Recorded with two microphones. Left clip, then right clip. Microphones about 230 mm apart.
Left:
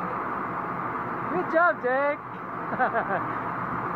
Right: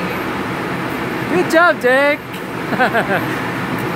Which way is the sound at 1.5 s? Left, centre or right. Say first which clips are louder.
Right 11 dB; centre.